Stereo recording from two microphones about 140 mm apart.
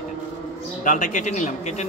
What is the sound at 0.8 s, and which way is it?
Speech, 65° left (ahead or behind).